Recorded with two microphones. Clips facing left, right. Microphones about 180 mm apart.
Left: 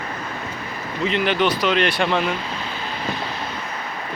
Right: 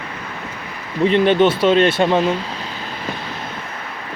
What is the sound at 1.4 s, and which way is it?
Speech, 25° right (ahead or behind).